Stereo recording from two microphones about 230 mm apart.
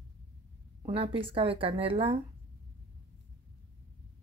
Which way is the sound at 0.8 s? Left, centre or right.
Right.